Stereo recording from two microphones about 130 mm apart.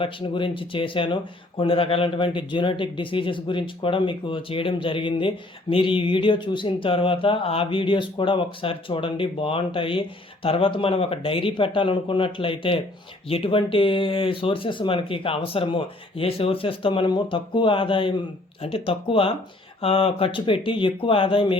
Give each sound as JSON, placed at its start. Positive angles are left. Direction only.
{"t": 0.0, "sound": "speech", "side_deg": 40}